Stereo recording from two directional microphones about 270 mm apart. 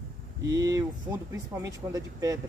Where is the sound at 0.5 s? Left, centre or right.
Centre.